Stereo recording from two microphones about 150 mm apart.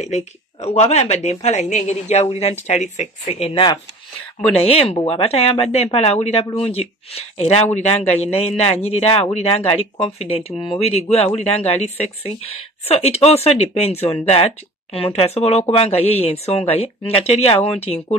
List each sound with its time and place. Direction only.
0.0 s speech: 50° left (ahead or behind)
4.6 s speech: 40° left (ahead or behind)